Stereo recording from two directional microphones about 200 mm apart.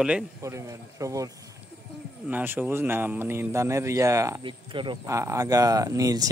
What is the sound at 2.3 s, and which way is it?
Speech, 10° right (ahead or behind).